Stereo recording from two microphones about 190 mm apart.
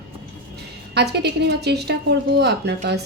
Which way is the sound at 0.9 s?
60° right (ahead or behind).